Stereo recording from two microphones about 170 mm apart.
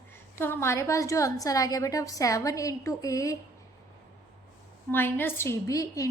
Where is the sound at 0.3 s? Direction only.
15° left (ahead or behind).